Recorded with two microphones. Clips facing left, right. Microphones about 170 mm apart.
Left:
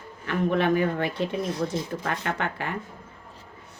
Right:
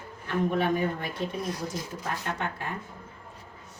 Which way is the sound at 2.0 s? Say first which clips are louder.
Left 4 dB; 70° left (ahead or behind).